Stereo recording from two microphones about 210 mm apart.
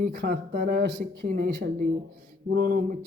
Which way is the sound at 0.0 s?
45° right (ahead or behind).